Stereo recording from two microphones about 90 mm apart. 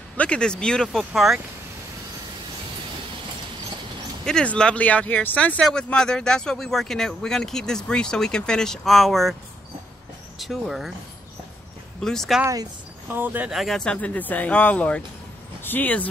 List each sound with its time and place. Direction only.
0.2 s speech: 10° left (ahead or behind)
4.2 s speech: 10° left (ahead or behind)
5.6 s speech: 10° left (ahead or behind)
10.4 s speech: centre (ahead or behind)
12.0 s speech: 5° left (ahead or behind)
13.1 s speech: 20° right (ahead or behind)
13.5 s speech: centre (ahead or behind); by 16.1 s 20° left (ahead or behind)